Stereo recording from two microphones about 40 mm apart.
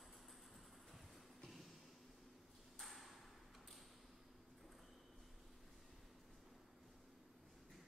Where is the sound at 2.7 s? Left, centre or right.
Centre.